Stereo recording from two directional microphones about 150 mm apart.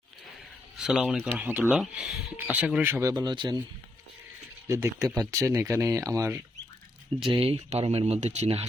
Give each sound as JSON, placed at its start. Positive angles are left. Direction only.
{"t": 0.8, "sound": "speech", "side_deg": -5}
{"t": 4.7, "sound": "speech", "side_deg": -20}
{"t": 7.2, "sound": "speech", "side_deg": -35}